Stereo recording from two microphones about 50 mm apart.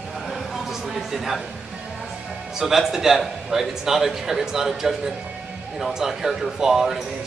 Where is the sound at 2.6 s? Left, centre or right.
Centre.